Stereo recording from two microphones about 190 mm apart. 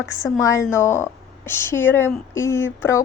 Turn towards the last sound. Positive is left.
turn(degrees=15)  # may be behind; listen again after turning